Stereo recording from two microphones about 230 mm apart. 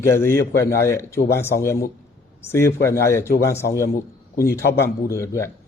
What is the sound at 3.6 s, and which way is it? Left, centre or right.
Speech, left.